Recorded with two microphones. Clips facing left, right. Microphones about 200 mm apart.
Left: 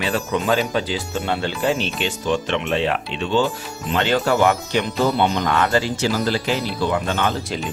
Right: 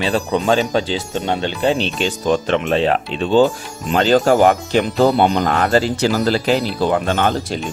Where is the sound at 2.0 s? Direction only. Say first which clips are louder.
Right 4 dB; 40° right (ahead or behind).